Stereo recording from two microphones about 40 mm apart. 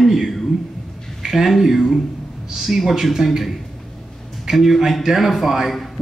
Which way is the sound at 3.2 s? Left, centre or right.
Centre.